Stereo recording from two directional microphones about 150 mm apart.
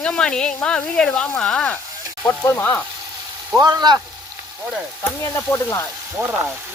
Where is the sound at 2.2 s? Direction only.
15° left (ahead or behind).